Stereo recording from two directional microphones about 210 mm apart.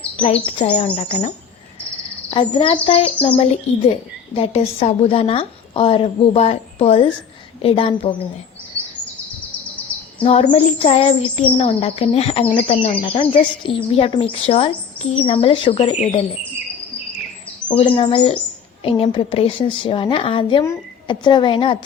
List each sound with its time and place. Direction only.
0.2 s speech: 30° left (ahead or behind)
2.3 s speech: 25° left (ahead or behind)
10.2 s speech: 30° left (ahead or behind)
17.7 s speech: 25° left (ahead or behind)